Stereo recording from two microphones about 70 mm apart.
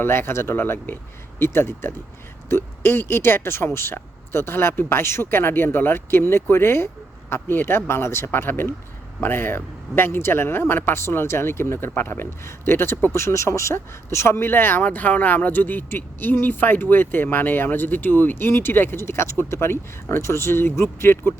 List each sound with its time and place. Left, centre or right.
0.0 s speech: left